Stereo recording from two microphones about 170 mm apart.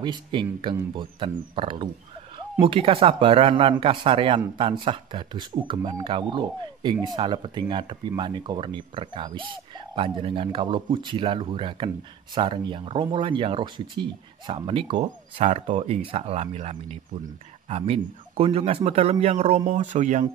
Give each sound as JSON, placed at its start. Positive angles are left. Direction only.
{"t": 0.0, "sound": "a man's voice", "side_deg": -25}